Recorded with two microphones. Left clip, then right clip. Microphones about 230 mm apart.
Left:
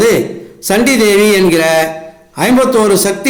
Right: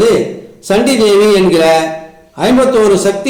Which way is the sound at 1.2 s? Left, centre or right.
Left.